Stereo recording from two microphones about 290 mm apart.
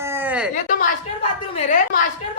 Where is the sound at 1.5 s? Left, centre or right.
Left.